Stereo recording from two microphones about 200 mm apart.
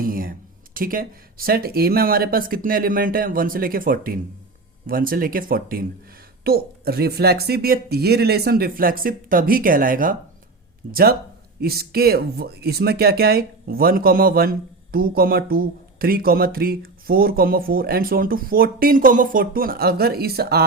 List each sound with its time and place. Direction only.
0.0 s speech: 45° right (ahead or behind)